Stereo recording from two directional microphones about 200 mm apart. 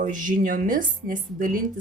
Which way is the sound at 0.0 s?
40° right (ahead or behind).